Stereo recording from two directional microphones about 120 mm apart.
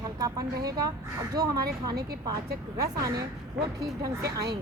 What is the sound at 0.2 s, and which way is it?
A woman's voice, 30° right (ahead or behind).